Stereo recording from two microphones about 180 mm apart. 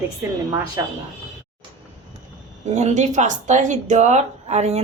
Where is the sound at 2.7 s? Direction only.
40° right (ahead or behind).